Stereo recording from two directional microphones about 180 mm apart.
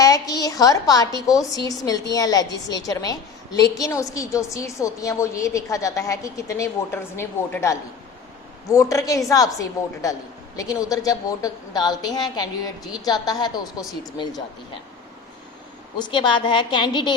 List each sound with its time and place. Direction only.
0.0 s a woman's voice: 20° left (ahead or behind)
16.0 s a woman's voice: 25° left (ahead or behind)